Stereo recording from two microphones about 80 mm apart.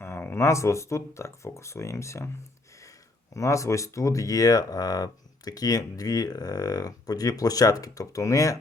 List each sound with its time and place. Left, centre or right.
0.0 s a sound: left
0.4 s speech: left
3.3 s speech: left